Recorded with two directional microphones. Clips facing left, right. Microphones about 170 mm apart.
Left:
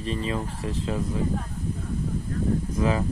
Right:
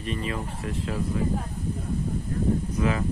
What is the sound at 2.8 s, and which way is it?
Speech, 30° left (ahead or behind).